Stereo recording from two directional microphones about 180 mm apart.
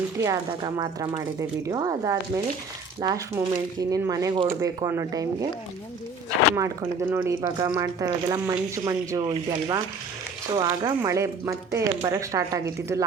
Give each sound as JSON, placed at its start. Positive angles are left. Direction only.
{"t": 0.2, "sound": "speech", "side_deg": -20}
{"t": 6.6, "sound": "speech", "side_deg": -10}